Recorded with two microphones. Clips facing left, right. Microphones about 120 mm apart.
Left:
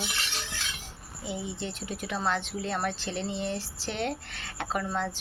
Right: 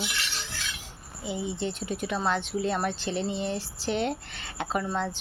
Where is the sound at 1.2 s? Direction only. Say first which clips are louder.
Right 4 dB; centre (ahead or behind).